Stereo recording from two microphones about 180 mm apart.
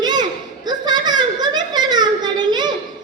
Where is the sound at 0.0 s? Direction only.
20° right (ahead or behind).